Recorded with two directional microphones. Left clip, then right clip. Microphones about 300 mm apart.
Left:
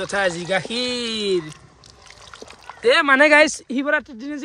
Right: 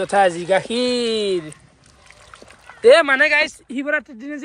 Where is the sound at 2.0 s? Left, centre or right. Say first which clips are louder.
Left 3 dB; centre.